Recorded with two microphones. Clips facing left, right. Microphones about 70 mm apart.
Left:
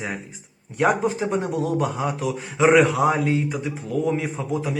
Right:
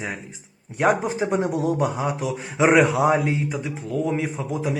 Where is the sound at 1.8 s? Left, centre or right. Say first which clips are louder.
Right 1 dB; centre.